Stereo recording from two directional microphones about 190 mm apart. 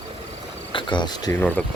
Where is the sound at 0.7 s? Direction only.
25° left (ahead or behind); by 1.6 s 10° left (ahead or behind).